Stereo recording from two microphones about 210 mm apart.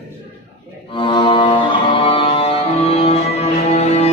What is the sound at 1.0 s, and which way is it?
Music, 25° left (ahead or behind).